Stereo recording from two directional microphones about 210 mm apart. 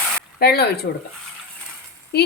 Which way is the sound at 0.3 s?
50° left (ahead or behind).